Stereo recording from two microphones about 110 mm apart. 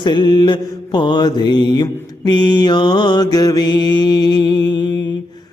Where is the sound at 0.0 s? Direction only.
45° left (ahead or behind).